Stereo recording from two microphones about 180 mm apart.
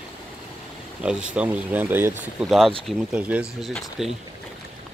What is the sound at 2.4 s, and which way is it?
Speech, centre (ahead or behind).